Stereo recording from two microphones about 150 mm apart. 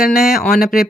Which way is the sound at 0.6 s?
70° left (ahead or behind).